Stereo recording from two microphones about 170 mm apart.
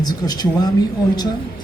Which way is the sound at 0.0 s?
25° left (ahead or behind).